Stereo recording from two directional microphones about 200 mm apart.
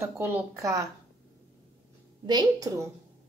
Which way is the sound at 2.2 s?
20° right (ahead or behind).